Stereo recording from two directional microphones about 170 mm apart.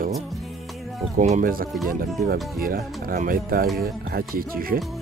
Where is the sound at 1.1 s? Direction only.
45° right (ahead or behind).